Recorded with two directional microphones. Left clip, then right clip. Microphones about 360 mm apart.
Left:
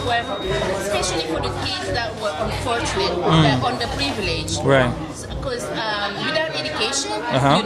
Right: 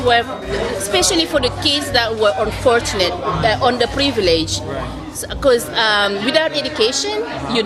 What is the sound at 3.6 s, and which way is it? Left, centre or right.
A woman's voice, centre.